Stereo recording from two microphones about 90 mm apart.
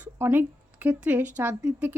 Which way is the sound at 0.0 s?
25° right (ahead or behind).